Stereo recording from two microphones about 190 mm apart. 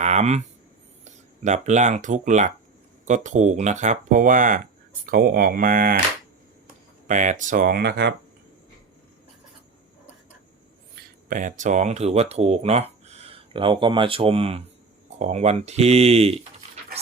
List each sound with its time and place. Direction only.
0.0 s speech: 35° right (ahead or behind)
7.1 s speech: 40° right (ahead or behind); by 8.1 s 60° right (ahead or behind)
11.3 s speech: 45° right (ahead or behind)